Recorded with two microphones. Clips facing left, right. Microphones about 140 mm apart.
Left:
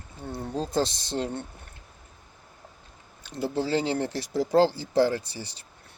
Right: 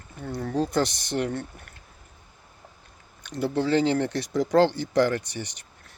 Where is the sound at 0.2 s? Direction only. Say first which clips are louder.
Right 4 dB; 25° left (ahead or behind).